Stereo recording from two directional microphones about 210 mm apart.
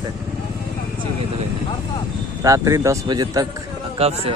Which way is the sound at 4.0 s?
30° right (ahead or behind).